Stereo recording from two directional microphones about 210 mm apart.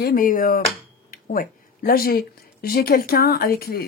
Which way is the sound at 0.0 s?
40° left (ahead or behind).